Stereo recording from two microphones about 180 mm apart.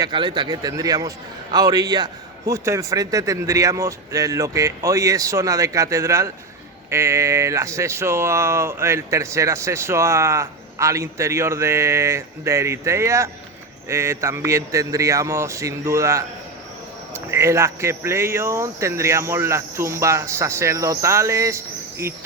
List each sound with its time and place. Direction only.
0.0 s speech: 25° right (ahead or behind)